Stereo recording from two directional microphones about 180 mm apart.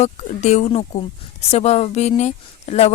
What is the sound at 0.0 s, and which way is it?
Speech, 40° left (ahead or behind).